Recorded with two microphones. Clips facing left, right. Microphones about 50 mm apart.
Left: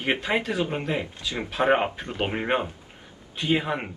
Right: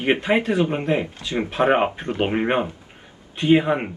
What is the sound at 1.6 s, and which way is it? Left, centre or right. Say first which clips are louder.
Speech: right 3 dB; centre.